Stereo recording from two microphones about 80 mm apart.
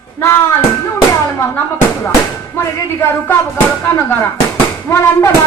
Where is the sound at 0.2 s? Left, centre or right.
Left.